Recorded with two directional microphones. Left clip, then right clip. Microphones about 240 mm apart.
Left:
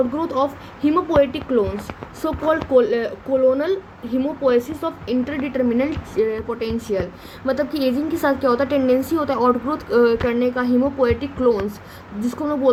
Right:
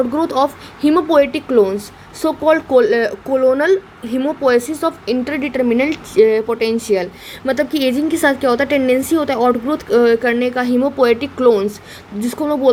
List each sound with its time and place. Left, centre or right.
0.2 s a woman's voice: right
8.3 s a woman's voice: right
8.5 s a woman's voice: right